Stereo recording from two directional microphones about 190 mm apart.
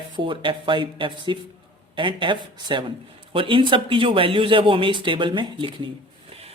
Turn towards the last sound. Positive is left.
turn(degrees=-25)  # may be behind; listen again after turning